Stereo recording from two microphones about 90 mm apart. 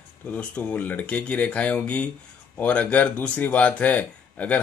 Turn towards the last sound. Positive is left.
turn(degrees=15)  # may be behind; listen again after turning